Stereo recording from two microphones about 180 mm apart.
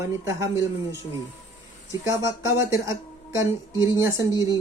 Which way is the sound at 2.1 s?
15° right (ahead or behind).